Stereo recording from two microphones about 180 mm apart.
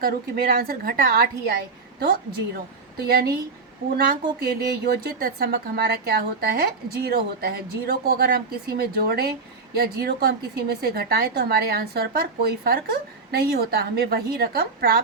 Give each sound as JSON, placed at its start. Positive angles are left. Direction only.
{"t": 0.0, "sound": "a woman's voice", "side_deg": -55}